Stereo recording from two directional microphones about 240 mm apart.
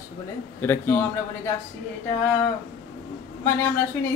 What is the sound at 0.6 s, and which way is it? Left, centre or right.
Speech, centre.